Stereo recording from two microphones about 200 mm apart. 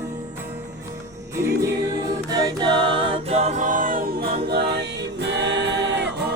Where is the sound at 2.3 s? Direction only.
20° right (ahead or behind).